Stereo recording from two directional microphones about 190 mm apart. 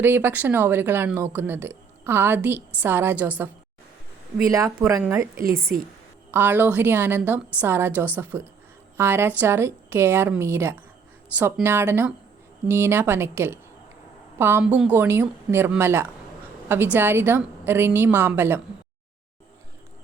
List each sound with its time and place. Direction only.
0.0 s speech: 10° right (ahead or behind)